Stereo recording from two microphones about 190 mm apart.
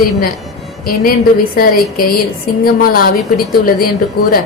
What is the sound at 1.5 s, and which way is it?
A woman's voice, 50° left (ahead or behind).